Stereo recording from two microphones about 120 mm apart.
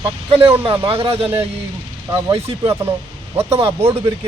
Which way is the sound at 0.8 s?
50° right (ahead or behind).